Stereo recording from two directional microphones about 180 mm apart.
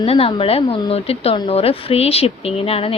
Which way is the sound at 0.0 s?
30° left (ahead or behind).